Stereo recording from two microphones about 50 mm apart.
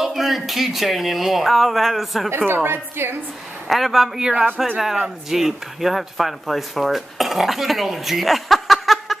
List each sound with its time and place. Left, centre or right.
0.0 s speech: centre
2.3 s a woman's voice: right
3.6 s a man's voice: centre
4.2 s speech: centre